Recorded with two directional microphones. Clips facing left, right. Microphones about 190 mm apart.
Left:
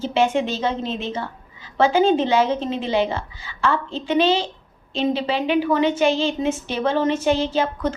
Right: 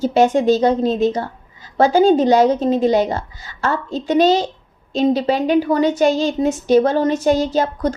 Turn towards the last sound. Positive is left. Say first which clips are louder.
# right 3 dB
turn(degrees=-40)  # may be behind; listen again after turning